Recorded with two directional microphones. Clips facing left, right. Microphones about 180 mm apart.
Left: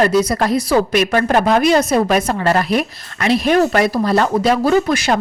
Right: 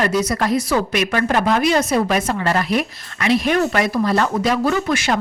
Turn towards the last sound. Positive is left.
turn(degrees=35)  # may be behind; listen again after turning